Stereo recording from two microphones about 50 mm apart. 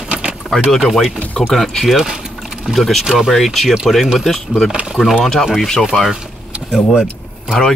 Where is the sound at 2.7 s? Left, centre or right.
Centre.